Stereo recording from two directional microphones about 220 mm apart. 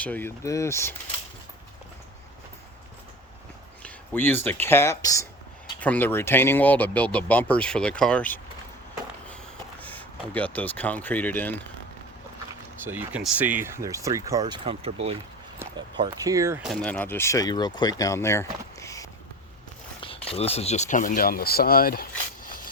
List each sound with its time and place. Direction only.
0.0 s speech: 10° left (ahead or behind)
3.8 s speech: 10° left (ahead or behind)
9.8 s speech: 5° left (ahead or behind)
12.8 s speech: 10° right (ahead or behind)
16.6 s speech: 5° left (ahead or behind)
20.0 s speech: 25° left (ahead or behind); by 22.0 s 40° left (ahead or behind)
22.4 s a sound: 40° left (ahead or behind)